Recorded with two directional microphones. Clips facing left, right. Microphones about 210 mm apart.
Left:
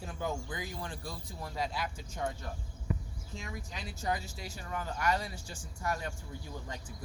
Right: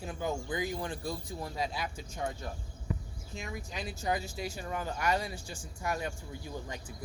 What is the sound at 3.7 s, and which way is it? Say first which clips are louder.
Speech: right 2 dB; 10° right (ahead or behind).